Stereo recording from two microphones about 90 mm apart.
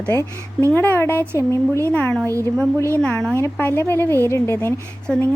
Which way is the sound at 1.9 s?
20° left (ahead or behind).